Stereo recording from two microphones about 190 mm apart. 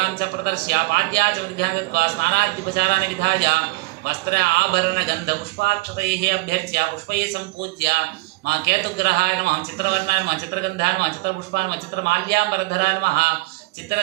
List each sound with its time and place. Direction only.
0.2 s a man's voice: 55° right (ahead or behind)
11.5 s a man's voice: 60° right (ahead or behind)